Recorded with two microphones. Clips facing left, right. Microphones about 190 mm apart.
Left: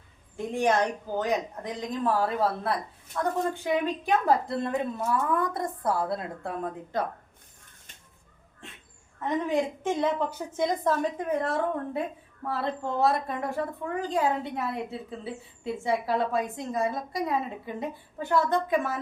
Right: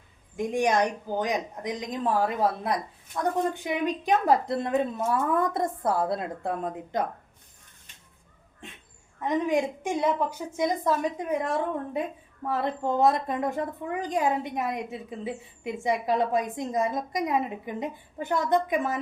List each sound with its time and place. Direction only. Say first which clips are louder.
0.3 s a woman's voice: right 1 dB; 15° right (ahead or behind)
9.2 s a woman's voice: right 2 dB; 15° right (ahead or behind)